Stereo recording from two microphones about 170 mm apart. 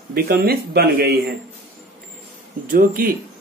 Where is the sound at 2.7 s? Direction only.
55° right (ahead or behind).